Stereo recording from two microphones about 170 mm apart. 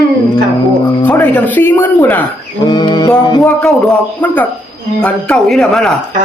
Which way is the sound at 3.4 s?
5° left (ahead or behind).